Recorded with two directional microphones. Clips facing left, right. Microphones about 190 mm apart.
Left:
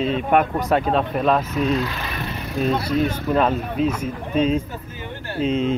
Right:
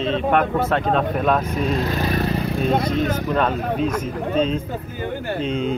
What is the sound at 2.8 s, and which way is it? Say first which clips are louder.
Speech: even; 5° left (ahead or behind).